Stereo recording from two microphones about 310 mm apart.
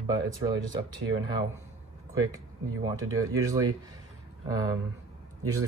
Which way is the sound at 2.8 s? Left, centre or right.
Centre.